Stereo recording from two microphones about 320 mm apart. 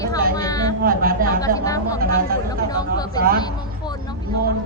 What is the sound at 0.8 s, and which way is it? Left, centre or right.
Speech, right.